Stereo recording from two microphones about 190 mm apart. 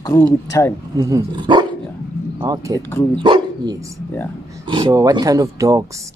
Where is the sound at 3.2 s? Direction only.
25° right (ahead or behind).